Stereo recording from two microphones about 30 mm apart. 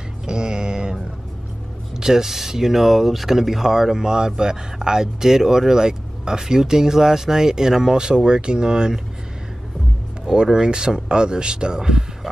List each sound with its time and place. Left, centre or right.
0.3 s a sound: right
2.0 s speech: centre
10.3 s speech: right